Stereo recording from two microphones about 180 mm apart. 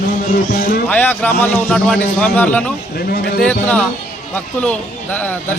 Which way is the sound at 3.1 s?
55° left (ahead or behind).